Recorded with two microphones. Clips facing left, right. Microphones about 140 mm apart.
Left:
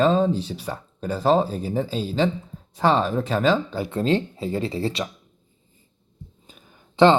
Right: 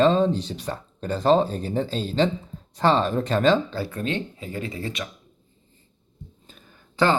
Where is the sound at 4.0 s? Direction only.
35° left (ahead or behind).